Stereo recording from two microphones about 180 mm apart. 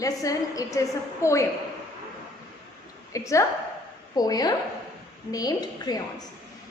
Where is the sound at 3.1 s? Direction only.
15° left (ahead or behind).